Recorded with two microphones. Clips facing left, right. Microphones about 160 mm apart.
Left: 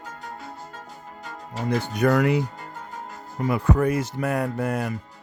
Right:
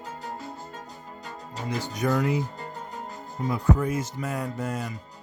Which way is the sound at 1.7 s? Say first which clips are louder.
Left 5 dB; 60° left (ahead or behind).